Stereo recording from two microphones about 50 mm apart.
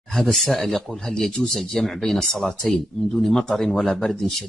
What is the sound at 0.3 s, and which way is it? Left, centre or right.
Speech, centre.